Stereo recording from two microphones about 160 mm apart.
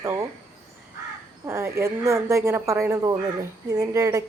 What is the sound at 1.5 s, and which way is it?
A woman's voice, 15° right (ahead or behind).